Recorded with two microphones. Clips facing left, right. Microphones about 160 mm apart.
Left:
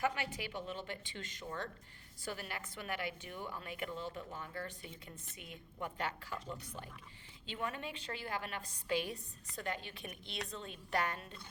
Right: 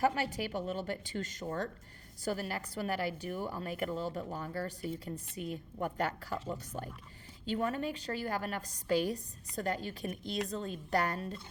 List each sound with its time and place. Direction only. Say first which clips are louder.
0.0 s a woman's voice: right 6 dB; 40° right (ahead or behind)